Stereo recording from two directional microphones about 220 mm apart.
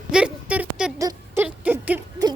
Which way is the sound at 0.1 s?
5° right (ahead or behind).